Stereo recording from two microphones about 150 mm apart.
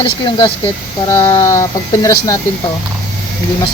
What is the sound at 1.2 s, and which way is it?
Speech, 20° left (ahead or behind).